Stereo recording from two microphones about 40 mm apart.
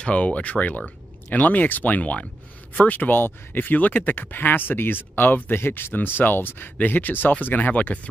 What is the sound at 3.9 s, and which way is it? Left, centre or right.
Speech, left.